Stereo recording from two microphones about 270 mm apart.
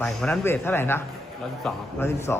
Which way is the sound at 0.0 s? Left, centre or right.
Centre.